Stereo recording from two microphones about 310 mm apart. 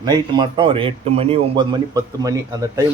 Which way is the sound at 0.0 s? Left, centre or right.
Centre.